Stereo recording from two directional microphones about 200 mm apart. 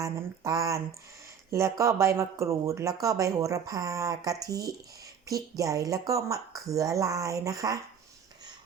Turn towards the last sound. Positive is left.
turn(degrees=-15)  # may be behind; listen again after turning